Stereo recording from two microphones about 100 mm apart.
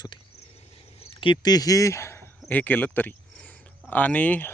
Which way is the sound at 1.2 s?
45° left (ahead or behind).